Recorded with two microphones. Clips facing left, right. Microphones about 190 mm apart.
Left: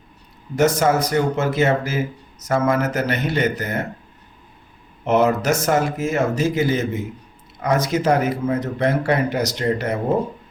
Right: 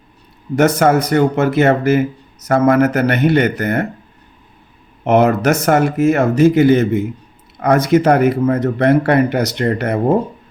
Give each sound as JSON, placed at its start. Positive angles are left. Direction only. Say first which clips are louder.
{"t": 0.5, "sound": "speech", "louder": "right 5 dB", "side_deg": -60}
{"t": 5.0, "sound": "speech", "louder": "right 5 dB", "side_deg": -60}